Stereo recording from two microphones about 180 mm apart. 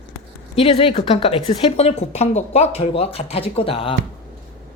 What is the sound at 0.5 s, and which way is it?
Speech, 30° left (ahead or behind).